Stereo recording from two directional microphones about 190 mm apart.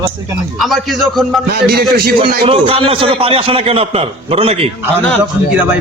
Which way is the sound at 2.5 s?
30° right (ahead or behind).